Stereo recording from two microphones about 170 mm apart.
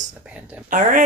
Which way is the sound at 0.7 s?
50° right (ahead or behind).